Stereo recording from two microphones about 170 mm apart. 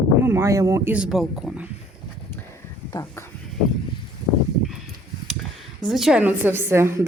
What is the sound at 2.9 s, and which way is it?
Speech, 25° left (ahead or behind).